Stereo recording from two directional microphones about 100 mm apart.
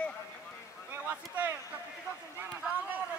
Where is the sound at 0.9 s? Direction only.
20° right (ahead or behind).